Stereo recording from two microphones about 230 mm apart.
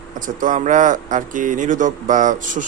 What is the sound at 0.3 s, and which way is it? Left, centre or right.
Speech, right.